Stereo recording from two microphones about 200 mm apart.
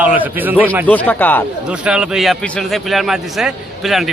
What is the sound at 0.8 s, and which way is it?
Speech, 10° left (ahead or behind).